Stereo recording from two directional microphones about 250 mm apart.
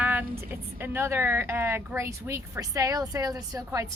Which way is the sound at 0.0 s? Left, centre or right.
Centre.